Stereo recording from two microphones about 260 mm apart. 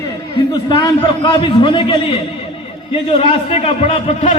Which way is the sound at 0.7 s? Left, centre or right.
Centre.